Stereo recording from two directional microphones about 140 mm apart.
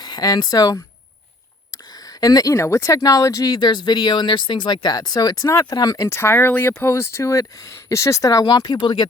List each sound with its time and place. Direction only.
0.0 s speech: 30° left (ahead or behind)